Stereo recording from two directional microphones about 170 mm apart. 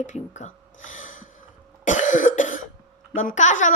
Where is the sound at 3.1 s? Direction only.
45° left (ahead or behind).